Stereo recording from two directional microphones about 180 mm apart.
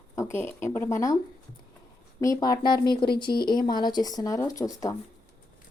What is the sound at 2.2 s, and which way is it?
Speech, 20° left (ahead or behind).